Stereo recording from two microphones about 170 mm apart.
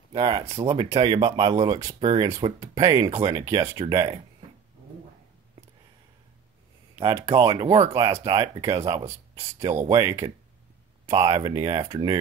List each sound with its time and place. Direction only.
0.1 s speech: 25° right (ahead or behind)
7.0 s speech: 20° right (ahead or behind)
7.6 s speech: 40° right (ahead or behind)
7.9 s speech: 20° right (ahead or behind)